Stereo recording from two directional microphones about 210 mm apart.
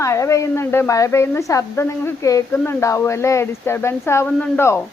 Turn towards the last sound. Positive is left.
turn(degrees=10)  # may be behind; listen again after turning